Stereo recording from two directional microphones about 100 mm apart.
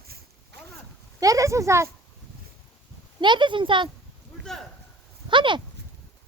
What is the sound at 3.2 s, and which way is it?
Speech, 50° right (ahead or behind).